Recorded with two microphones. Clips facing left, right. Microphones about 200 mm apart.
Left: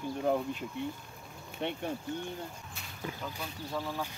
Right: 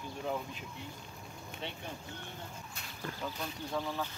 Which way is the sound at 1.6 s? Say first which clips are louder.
Left 9 dB; 55° left (ahead or behind).